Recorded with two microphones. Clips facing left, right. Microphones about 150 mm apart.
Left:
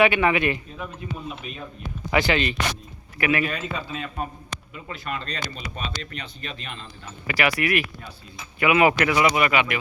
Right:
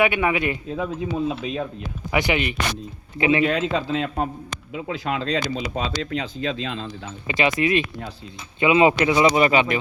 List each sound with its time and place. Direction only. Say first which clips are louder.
0.0 s speech: left 1 dB; 15° right (ahead or behind)
0.7 s a man's voice: right 9 dB; 90° right
2.1 s speech: even; 15° right (ahead or behind)
3.4 s a man's voice: right 8 dB; 90° right
7.3 s speech: right 3 dB; 20° right (ahead or behind)